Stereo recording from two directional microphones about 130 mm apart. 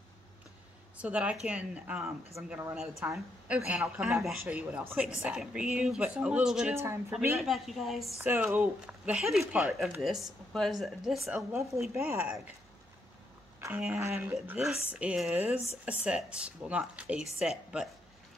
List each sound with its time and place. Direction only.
1.0 s a woman's voice: 10° right (ahead or behind)
6.7 s a woman's voice: 20° right (ahead or behind)
7.3 s speech: centre (ahead or behind)
8.2 s a woman's voice: 15° right (ahead or behind)
11.5 s a woman's voice: 20° right (ahead or behind)
13.6 s a woman's voice: 15° right (ahead or behind)